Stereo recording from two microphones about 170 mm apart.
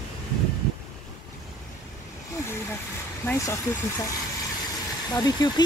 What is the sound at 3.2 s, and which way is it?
Speech, 15° left (ahead or behind).